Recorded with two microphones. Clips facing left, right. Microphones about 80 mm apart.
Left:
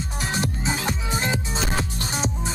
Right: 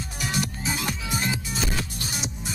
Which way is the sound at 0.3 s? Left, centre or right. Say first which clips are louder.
Left 2 dB; left.